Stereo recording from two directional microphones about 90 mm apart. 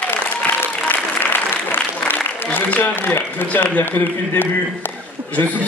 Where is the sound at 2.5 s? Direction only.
20° left (ahead or behind).